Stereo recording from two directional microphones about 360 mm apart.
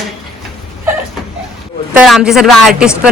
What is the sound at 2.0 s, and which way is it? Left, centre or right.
Speech, centre.